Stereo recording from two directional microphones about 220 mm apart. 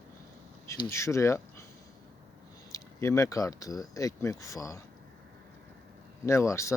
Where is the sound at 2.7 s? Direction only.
15° left (ahead or behind).